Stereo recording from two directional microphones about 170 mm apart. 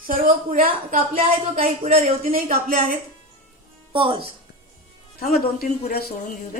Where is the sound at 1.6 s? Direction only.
35° right (ahead or behind).